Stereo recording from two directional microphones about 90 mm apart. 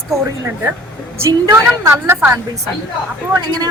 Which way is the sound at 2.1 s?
25° right (ahead or behind).